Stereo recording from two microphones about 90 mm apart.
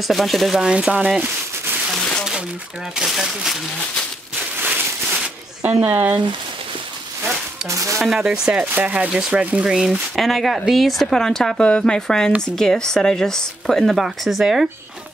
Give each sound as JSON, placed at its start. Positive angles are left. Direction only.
{"t": 0.1, "sound": "speech", "side_deg": 0}
{"t": 3.0, "sound": "speech", "side_deg": 0}
{"t": 4.6, "sound": "a sound", "side_deg": -20}
{"t": 7.6, "sound": "speech", "side_deg": -35}
{"t": 8.0, "sound": "speech", "side_deg": -5}